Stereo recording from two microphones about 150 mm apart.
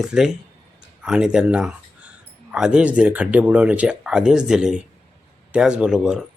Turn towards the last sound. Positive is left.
turn(degrees=-5)  # may be behind; listen again after turning